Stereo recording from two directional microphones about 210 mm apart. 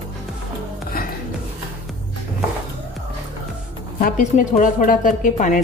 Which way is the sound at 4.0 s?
40° left (ahead or behind).